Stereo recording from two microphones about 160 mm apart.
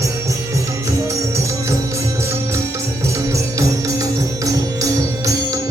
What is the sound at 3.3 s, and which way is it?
Music, 20° right (ahead or behind).